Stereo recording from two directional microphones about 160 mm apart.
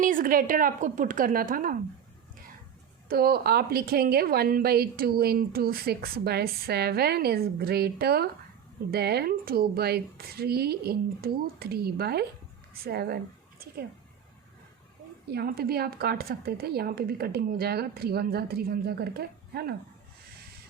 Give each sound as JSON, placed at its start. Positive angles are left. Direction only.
{"t": 0.0, "sound": "speech", "side_deg": -60}
{"t": 3.1, "sound": "a woman's voice", "side_deg": -70}
{"t": 15.3, "sound": "a woman's voice", "side_deg": -75}